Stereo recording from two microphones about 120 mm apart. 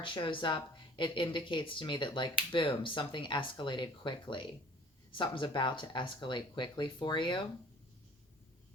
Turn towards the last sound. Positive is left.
turn(degrees=40)  # may be behind; listen again after turning